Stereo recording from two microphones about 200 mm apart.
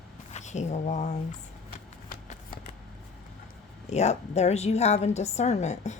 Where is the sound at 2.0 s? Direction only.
45° left (ahead or behind).